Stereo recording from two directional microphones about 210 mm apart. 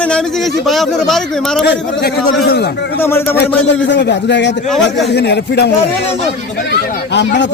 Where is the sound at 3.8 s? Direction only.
55° left (ahead or behind).